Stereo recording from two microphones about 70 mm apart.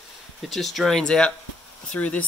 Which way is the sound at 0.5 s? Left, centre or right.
Centre.